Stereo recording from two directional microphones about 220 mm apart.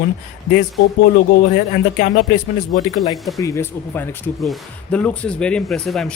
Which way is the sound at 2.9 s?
15° left (ahead or behind).